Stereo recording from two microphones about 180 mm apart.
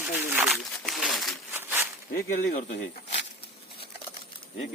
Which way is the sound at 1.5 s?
10° right (ahead or behind).